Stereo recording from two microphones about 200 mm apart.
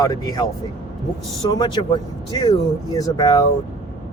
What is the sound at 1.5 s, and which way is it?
Speech, 20° left (ahead or behind).